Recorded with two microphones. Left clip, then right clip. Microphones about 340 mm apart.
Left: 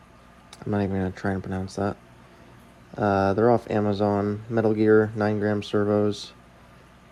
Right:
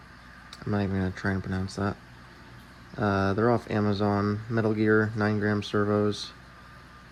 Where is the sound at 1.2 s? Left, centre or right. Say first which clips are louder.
Left 2 dB; left.